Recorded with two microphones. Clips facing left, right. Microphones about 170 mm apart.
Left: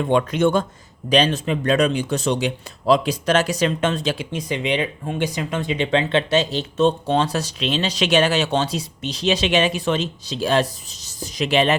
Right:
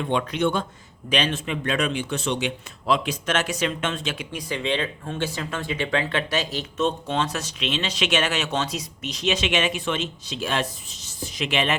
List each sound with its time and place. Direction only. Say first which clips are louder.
0.1 s a man's voice: left 6 dB; 45° left (ahead or behind)